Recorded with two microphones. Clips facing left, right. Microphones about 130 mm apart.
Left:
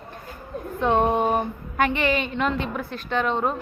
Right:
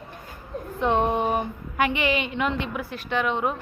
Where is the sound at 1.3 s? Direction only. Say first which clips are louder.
Left 2 dB; 15° right (ahead or behind).